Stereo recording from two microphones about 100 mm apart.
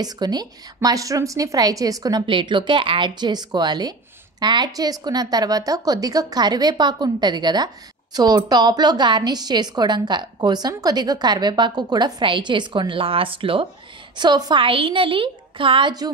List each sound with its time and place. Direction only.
0.0 s a woman's voice: 45° right (ahead or behind)
2.2 s a woman's voice: 55° right (ahead or behind)
14.1 s a woman's voice: 45° right (ahead or behind)